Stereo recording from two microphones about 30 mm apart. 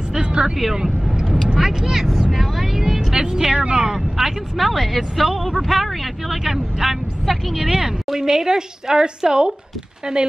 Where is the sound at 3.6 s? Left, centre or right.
Right.